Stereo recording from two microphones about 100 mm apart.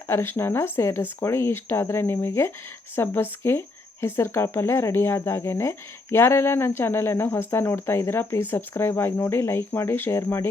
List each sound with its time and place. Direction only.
0.1 s speech: 25° left (ahead or behind)